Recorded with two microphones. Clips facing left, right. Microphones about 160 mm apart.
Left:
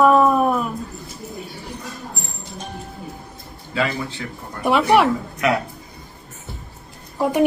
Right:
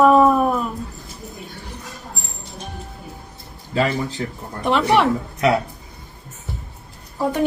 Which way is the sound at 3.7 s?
40° right (ahead or behind).